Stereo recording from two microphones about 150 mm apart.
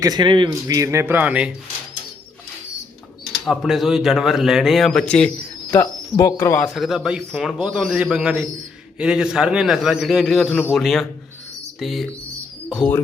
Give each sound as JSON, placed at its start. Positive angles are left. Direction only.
{"t": 0.0, "sound": "speech", "side_deg": -30}
{"t": 3.4, "sound": "speech", "side_deg": 0}
{"t": 5.7, "sound": "speech", "side_deg": 20}
{"t": 6.6, "sound": "speech", "side_deg": 0}